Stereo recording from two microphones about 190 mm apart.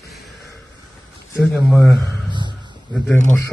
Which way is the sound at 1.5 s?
Centre (ahead or behind).